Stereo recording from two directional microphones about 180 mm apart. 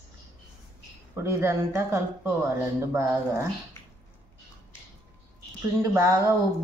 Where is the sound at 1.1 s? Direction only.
15° right (ahead or behind).